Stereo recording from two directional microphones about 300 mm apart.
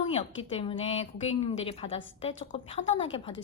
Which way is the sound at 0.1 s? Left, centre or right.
Centre.